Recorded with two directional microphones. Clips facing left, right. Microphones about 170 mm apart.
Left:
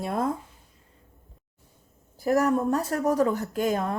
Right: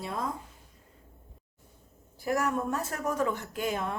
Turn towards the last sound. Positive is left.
turn(degrees=40)  # may be behind; listen again after turning